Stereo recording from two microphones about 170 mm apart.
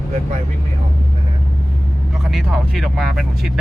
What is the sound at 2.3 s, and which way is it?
Speech, centre (ahead or behind).